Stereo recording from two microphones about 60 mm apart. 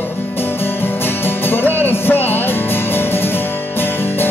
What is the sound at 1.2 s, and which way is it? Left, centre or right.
Music, left.